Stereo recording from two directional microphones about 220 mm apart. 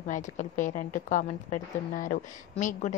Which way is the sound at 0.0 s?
35° left (ahead or behind).